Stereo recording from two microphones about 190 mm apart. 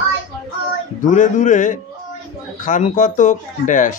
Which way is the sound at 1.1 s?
40° left (ahead or behind).